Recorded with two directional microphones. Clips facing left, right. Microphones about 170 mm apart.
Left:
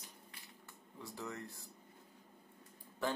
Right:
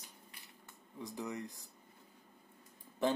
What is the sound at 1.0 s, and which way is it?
Speech, 15° right (ahead or behind).